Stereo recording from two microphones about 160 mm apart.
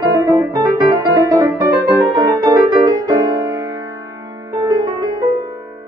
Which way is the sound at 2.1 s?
25° right (ahead or behind).